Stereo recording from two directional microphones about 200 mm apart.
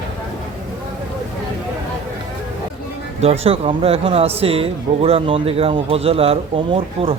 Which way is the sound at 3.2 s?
30° right (ahead or behind).